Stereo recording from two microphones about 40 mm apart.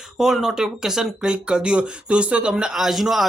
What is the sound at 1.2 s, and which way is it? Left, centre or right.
Speech, right.